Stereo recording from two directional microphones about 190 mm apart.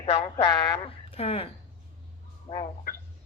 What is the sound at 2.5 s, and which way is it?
Speech, 35° left (ahead or behind).